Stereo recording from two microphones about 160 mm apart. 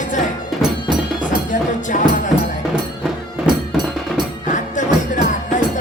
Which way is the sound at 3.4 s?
30° right (ahead or behind).